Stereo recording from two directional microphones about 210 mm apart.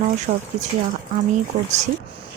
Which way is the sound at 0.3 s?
35° right (ahead or behind).